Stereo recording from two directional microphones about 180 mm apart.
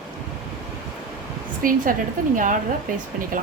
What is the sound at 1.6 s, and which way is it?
Speech, 50° right (ahead or behind).